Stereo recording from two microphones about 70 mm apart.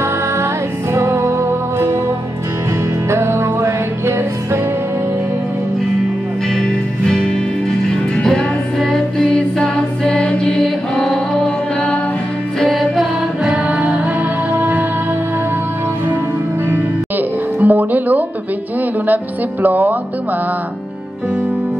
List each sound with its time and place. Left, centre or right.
0.9 s music: right
3.1 s music: right
6.6 s music: centre
13.5 s music: centre
17.6 s music: right
19.6 s music: right